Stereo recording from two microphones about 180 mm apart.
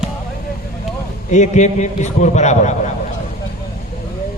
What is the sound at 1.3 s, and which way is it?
A man's voice, 40° left (ahead or behind).